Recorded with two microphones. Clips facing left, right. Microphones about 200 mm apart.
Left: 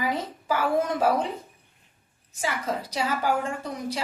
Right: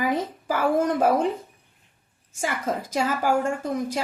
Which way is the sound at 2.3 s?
50° right (ahead or behind).